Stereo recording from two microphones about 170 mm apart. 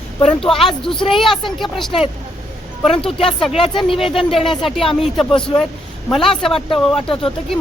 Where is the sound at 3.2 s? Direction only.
30° left (ahead or behind).